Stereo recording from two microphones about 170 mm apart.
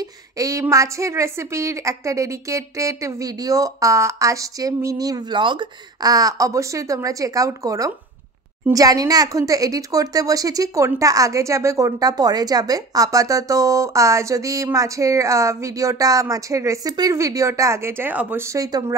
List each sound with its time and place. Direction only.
0.4 s speech: 20° right (ahead or behind)